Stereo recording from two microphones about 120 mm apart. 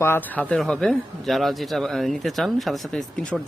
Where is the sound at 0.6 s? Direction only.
5° left (ahead or behind).